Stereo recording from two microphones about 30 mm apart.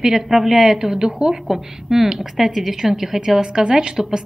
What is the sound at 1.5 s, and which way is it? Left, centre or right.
A woman's voice, centre.